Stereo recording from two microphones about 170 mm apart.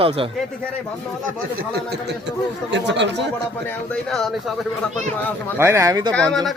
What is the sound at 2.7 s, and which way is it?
Speech, 90° right.